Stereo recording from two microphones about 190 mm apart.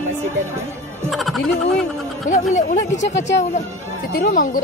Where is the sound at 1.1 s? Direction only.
Centre (ahead or behind).